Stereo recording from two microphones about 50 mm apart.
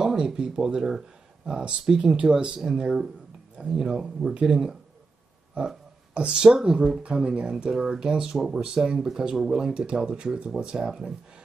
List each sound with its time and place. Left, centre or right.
0.0 s speech: centre